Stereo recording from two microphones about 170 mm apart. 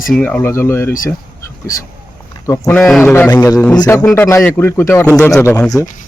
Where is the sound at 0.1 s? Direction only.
5° left (ahead or behind).